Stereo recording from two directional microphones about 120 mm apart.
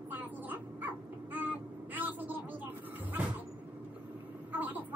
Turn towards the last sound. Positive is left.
turn(degrees=-15)  # may be behind; listen again after turning